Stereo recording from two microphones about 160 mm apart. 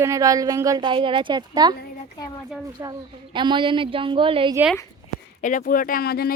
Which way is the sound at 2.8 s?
25° right (ahead or behind).